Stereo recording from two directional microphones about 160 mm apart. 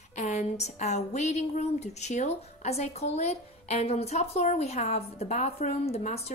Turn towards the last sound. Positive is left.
turn(degrees=40)  # may be behind; listen again after turning